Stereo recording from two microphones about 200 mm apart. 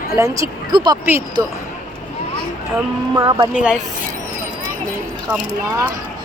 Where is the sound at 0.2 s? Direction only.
15° right (ahead or behind).